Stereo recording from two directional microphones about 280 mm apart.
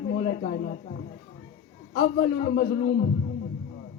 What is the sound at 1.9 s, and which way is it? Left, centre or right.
Speech, left.